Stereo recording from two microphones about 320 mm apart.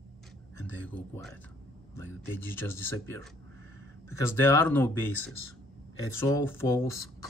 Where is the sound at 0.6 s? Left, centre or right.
Centre.